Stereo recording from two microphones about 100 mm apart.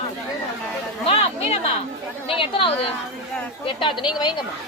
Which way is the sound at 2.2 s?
65° left (ahead or behind).